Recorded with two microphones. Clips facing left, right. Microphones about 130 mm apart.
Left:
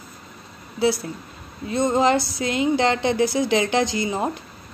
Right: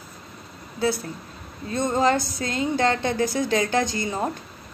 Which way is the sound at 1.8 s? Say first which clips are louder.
Left 2 dB; 15° left (ahead or behind).